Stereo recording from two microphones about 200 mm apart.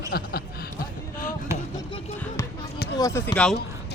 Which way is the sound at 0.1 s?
55° left (ahead or behind).